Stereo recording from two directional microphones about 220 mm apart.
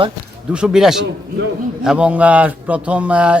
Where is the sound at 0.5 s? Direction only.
5° right (ahead or behind).